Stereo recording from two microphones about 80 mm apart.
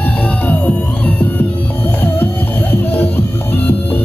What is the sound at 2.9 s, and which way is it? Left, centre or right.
Music, left.